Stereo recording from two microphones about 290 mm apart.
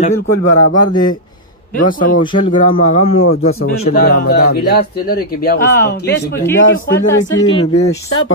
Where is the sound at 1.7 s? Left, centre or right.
Left.